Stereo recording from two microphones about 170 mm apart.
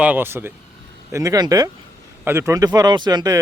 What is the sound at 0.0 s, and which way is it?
Speech, 10° right (ahead or behind).